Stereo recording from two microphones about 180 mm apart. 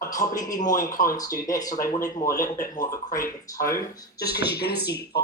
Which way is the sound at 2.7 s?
50° left (ahead or behind).